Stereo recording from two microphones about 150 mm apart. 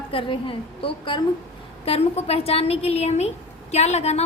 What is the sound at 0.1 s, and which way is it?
A woman's voice, 35° left (ahead or behind).